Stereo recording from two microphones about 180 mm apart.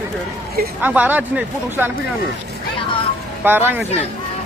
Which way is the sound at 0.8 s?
10° right (ahead or behind).